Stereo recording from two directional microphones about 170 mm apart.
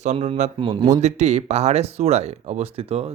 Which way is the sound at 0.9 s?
40° right (ahead or behind).